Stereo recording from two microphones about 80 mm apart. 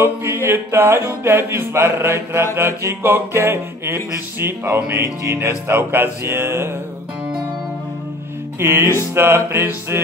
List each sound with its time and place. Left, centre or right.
0.0 s music: right
8.5 s music: right